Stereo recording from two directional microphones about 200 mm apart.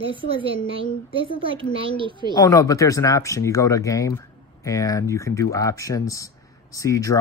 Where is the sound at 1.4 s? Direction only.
25° right (ahead or behind).